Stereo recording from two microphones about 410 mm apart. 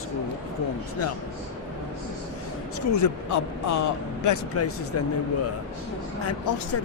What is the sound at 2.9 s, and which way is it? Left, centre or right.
Speech, left.